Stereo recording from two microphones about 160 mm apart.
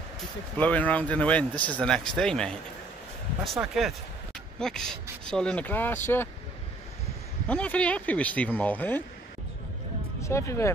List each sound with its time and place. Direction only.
0.2 s speech: 10° left (ahead or behind)
3.5 s speech: centre (ahead or behind)
7.4 s speech: 10° left (ahead or behind)
10.2 s speech: 15° left (ahead or behind)